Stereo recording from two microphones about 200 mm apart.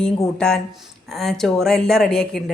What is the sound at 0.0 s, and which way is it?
A woman's voice, 5° left (ahead or behind).